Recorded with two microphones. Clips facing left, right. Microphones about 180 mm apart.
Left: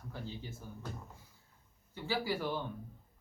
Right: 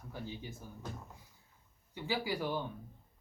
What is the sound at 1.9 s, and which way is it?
Speech, 15° right (ahead or behind).